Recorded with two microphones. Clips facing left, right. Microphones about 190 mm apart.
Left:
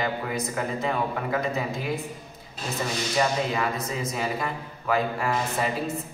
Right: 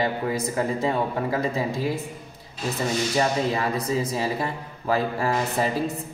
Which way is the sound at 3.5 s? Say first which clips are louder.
Right 3 dB; 30° right (ahead or behind).